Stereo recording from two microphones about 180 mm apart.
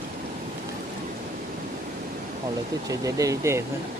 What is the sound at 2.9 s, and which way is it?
Speech, 20° right (ahead or behind).